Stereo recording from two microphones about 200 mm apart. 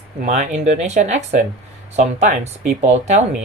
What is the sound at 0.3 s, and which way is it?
Speech, 35° right (ahead or behind).